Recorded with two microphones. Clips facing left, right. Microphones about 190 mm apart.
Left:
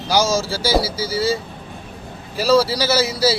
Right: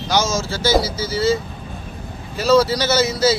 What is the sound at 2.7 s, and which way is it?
Speech, 10° left (ahead or behind).